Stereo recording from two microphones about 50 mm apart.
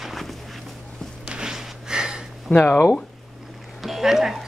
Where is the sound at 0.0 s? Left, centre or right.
Centre.